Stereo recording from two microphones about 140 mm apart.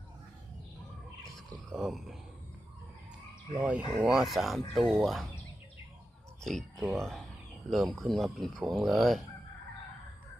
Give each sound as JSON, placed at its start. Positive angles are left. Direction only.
{"t": 1.7, "sound": "speech", "side_deg": 0}
{"t": 3.6, "sound": "speech", "side_deg": -10}
{"t": 6.4, "sound": "speech", "side_deg": 5}